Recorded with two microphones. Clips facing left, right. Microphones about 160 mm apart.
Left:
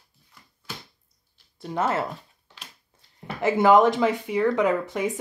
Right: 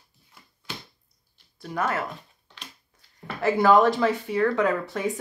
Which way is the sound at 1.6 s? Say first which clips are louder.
Left 2 dB; 25° left (ahead or behind).